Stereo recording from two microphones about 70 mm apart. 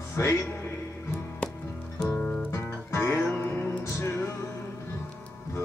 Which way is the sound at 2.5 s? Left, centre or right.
Left.